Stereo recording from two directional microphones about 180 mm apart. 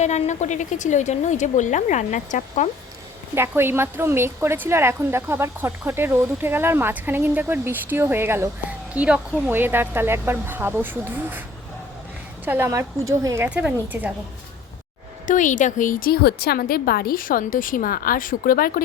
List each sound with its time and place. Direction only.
0.0 s a woman's voice: 40° left (ahead or behind)
3.3 s speech: 15° right (ahead or behind)
12.5 s speech: 15° right (ahead or behind)
15.3 s a woman's voice: 45° left (ahead or behind)